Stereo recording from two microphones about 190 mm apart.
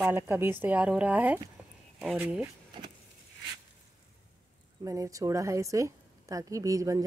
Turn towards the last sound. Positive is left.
turn(degrees=-15)  # may be behind; listen again after turning